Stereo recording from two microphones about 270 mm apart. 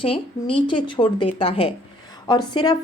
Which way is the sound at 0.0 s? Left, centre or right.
Centre.